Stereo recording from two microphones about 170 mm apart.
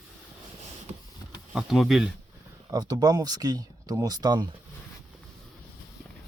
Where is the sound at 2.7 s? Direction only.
25° right (ahead or behind).